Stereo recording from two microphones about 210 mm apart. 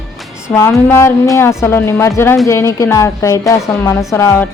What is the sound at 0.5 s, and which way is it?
A woman's voice, 15° left (ahead or behind).